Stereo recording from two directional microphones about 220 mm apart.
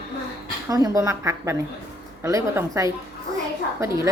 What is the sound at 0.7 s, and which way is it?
A woman's voice, 15° right (ahead or behind).